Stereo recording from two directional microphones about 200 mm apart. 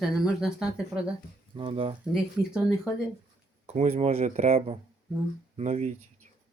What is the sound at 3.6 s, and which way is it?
Speech, 35° right (ahead or behind).